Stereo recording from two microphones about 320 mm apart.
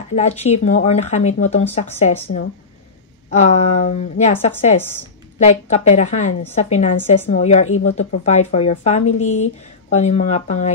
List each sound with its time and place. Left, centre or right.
0.1 s a woman's voice: centre